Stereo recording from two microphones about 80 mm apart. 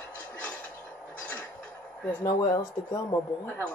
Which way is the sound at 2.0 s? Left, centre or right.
Centre.